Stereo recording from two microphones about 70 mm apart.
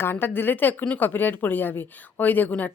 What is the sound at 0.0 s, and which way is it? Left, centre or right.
A woman's voice, left.